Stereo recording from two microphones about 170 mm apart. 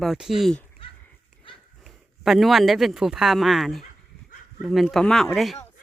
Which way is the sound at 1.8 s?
Centre (ahead or behind).